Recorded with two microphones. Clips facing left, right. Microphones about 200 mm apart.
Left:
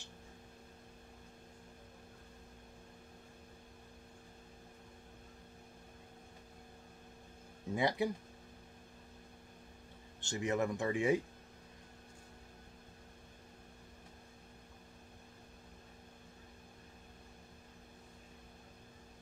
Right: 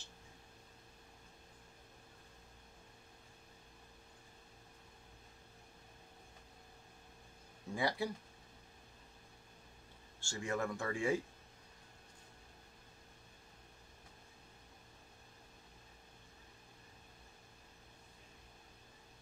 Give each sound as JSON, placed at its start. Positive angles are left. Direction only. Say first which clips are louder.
{"t": 7.7, "sound": "speech", "louder": "left 4 dB", "side_deg": 20}
{"t": 10.2, "sound": "speech", "louder": "left 4 dB", "side_deg": 20}